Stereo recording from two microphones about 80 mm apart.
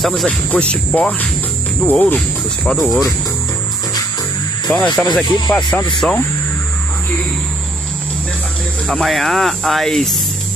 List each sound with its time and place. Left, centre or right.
0.0 s speech: centre
0.5 s speech: centre
2.7 s speech: centre
4.6 s speech: centre
8.8 s speech: centre